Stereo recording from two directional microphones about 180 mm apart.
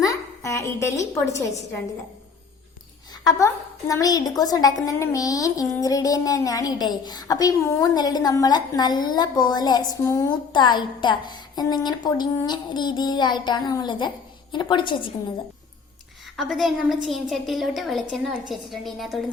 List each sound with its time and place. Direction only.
0.0 s a woman's voice: 20° left (ahead or behind)
3.2 s speech: 20° left (ahead or behind)
16.4 s a woman's voice: centre (ahead or behind)